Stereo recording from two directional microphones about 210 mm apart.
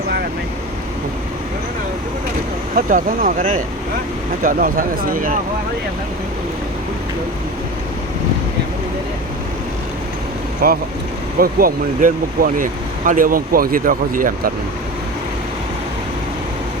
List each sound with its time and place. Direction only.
2.7 s speech: 40° right (ahead or behind)
10.6 s speech: 45° right (ahead or behind)